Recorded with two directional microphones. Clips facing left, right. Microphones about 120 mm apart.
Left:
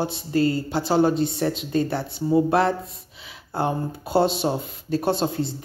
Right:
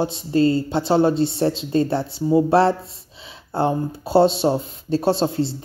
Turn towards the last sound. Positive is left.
turn(degrees=-25)  # may be behind; listen again after turning